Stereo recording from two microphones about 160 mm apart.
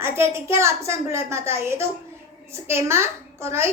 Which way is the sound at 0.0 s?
15° right (ahead or behind).